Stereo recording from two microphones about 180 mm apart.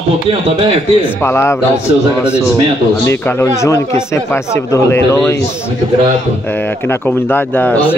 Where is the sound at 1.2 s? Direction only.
15° left (ahead or behind).